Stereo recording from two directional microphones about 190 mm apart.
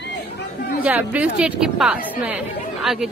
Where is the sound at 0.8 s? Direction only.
10° right (ahead or behind).